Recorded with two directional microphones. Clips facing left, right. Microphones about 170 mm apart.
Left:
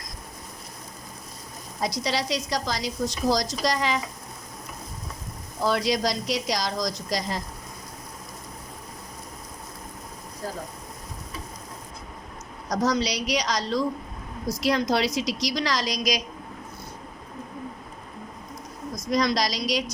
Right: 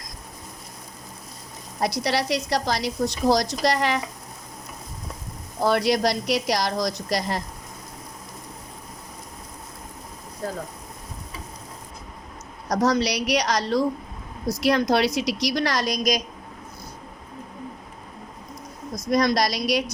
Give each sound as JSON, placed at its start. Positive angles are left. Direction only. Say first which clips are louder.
{"t": 1.8, "sound": "a woman's voice", "louder": "right 3 dB", "side_deg": -60}
{"t": 5.6, "sound": "a woman's voice", "louder": "right 3 dB", "side_deg": -60}
{"t": 12.6, "sound": "a woman's voice", "louder": "right 3 dB", "side_deg": -65}
{"t": 18.9, "sound": "a woman's voice", "louder": "right 3 dB", "side_deg": -55}